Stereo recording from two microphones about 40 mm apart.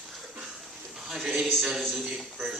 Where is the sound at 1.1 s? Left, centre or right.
Centre.